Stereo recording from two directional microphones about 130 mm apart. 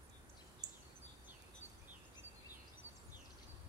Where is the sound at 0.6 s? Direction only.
30° right (ahead or behind).